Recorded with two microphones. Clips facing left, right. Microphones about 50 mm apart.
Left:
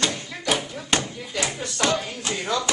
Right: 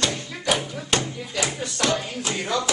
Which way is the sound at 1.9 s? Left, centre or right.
Centre.